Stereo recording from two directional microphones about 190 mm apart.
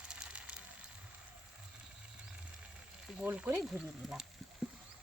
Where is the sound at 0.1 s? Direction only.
5° right (ahead or behind).